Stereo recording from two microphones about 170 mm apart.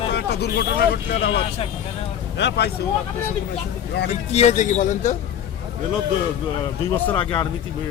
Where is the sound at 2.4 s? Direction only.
90° left.